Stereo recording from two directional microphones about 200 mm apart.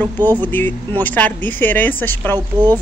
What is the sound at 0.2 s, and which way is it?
Speech, 20° right (ahead or behind).